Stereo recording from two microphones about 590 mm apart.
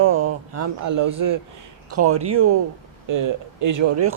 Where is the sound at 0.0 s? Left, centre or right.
Right.